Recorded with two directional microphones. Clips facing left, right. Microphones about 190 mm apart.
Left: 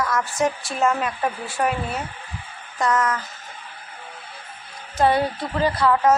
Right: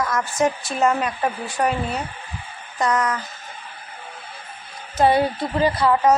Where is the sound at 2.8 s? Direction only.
Centre (ahead or behind).